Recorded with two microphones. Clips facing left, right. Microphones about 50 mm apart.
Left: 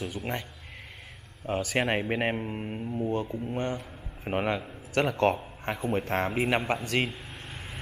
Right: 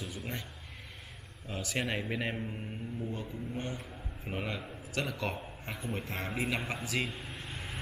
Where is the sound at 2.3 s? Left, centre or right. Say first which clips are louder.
Left 6 dB; left.